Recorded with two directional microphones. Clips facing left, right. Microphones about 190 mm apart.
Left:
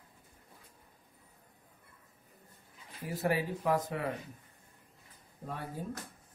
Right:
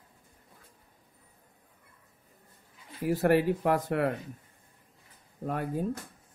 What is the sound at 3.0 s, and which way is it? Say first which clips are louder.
Speech: right 8 dB; 65° right (ahead or behind).